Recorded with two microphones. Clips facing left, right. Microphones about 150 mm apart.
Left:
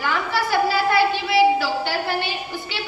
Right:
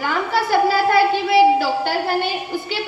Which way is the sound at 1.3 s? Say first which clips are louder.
Right 4 dB; 50° right (ahead or behind).